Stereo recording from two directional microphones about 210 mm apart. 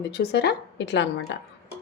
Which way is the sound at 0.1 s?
50° left (ahead or behind).